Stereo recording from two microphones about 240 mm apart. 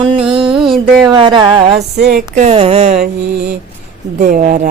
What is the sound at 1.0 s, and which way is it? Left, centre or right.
Speech, centre.